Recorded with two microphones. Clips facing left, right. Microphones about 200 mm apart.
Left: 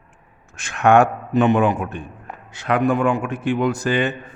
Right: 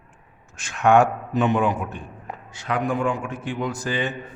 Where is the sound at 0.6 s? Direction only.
65° left (ahead or behind).